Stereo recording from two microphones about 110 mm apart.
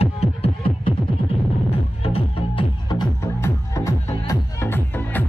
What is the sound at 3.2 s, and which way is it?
Music, 25° left (ahead or behind).